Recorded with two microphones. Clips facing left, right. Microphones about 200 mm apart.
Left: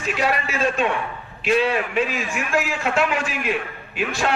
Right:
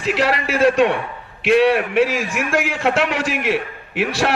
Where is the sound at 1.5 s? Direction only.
65° right (ahead or behind).